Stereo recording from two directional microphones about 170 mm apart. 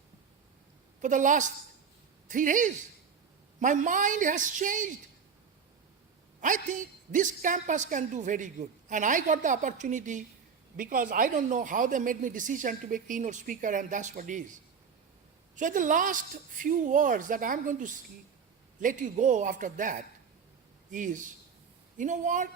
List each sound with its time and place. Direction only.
1.0 s a woman's voice: 50° right (ahead or behind)
6.4 s a woman's voice: 50° right (ahead or behind)